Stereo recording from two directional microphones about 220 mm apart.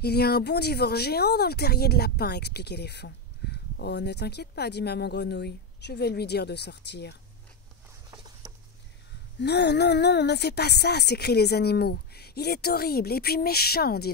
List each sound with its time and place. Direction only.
0.0 s speech: 45° left (ahead or behind)
8.1 s a sound: 15° right (ahead or behind)
9.4 s speech: 50° left (ahead or behind)